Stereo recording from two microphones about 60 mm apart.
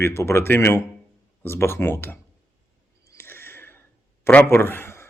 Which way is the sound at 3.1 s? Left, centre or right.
Left.